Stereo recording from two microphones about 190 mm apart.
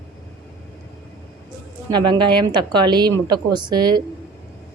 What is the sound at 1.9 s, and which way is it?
A woman's voice, 25° right (ahead or behind).